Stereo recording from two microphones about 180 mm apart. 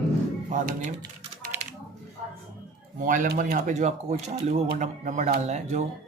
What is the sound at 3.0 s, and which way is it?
Speech, 45° right (ahead or behind).